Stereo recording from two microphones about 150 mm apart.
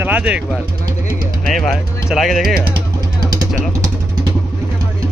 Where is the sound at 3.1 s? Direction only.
25° right (ahead or behind).